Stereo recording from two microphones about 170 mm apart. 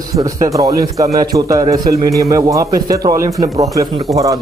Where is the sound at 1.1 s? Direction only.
20° right (ahead or behind).